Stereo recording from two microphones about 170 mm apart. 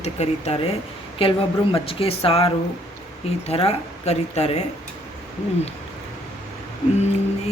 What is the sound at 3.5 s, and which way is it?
A man's voice, 35° left (ahead or behind).